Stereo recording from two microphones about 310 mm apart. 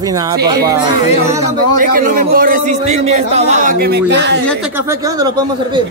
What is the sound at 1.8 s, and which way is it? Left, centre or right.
A man's voice, right.